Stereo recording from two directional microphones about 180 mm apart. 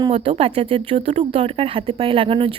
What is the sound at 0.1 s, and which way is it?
A woman's voice, 35° right (ahead or behind).